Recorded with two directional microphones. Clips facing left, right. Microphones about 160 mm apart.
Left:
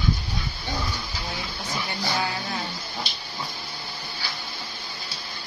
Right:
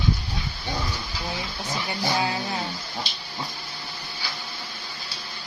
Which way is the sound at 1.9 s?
20° right (ahead or behind).